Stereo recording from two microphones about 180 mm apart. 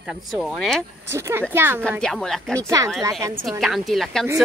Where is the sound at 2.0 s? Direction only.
5° left (ahead or behind).